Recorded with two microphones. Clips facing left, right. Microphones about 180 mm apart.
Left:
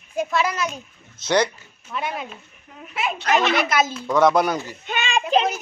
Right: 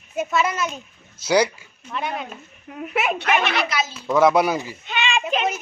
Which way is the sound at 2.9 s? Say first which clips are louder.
Right 3 dB; 65° right (ahead or behind).